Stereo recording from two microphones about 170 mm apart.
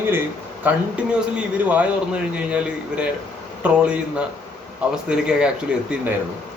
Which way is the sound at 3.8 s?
5° right (ahead or behind).